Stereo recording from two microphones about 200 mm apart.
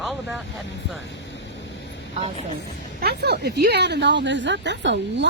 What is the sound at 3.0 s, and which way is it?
A woman's voice, 55° right (ahead or behind).